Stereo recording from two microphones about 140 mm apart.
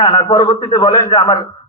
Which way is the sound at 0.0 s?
35° left (ahead or behind).